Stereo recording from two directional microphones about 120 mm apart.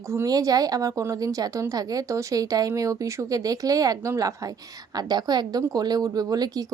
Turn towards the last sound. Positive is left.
turn(degrees=-35)  # may be behind; listen again after turning